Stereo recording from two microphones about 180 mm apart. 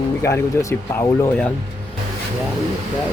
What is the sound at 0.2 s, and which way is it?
Speech, 15° left (ahead or behind).